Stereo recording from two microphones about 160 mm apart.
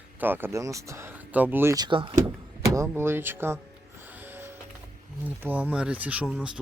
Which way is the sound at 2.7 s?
15° right (ahead or behind).